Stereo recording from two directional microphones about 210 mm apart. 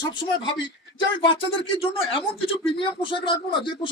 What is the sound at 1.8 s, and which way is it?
Speech, 25° left (ahead or behind).